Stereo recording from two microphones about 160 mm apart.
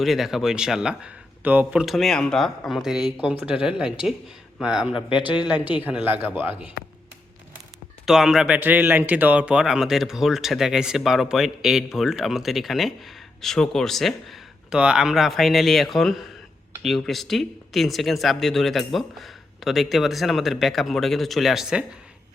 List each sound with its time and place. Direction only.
0.0 s speech: centre (ahead or behind)
4.9 s a man's voice: 30° left (ahead or behind)
5.5 s a man's voice: 10° right (ahead or behind)
8.0 s speech: centre (ahead or behind)